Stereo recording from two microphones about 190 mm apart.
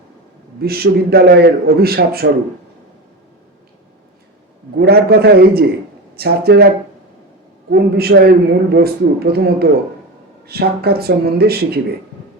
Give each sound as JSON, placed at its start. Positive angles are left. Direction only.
{"t": 0.6, "sound": "a man's voice", "side_deg": -55}
{"t": 4.8, "sound": "a man's voice", "side_deg": -55}
{"t": 7.7, "sound": "a man's voice", "side_deg": -55}